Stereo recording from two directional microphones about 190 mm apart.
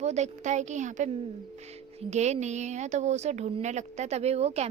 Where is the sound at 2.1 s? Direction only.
35° right (ahead or behind).